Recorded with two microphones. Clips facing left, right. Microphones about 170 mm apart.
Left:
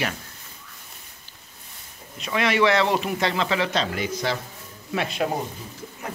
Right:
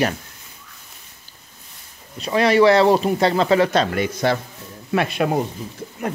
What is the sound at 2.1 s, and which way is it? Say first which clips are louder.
Speech: right 7 dB; 35° right (ahead or behind).